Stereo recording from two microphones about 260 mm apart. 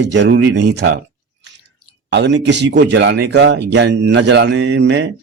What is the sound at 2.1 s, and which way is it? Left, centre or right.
Speech, right.